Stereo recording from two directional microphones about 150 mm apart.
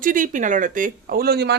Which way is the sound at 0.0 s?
60° right (ahead or behind).